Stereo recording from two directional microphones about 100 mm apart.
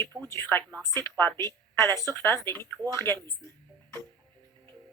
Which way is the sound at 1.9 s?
35° right (ahead or behind).